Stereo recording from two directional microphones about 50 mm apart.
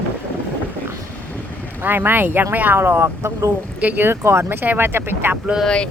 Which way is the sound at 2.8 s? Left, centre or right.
Right.